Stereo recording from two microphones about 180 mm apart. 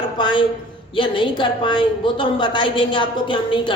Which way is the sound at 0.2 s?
25° left (ahead or behind).